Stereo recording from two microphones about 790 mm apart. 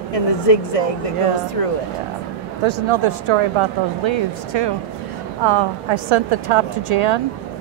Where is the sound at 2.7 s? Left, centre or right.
Right.